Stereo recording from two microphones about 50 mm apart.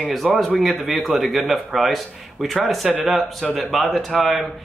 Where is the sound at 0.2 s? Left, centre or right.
Centre.